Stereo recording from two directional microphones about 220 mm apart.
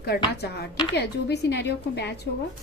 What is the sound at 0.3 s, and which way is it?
A woman's voice, 50° left (ahead or behind).